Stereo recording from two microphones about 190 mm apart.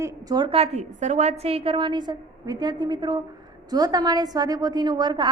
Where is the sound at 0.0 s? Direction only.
20° right (ahead or behind).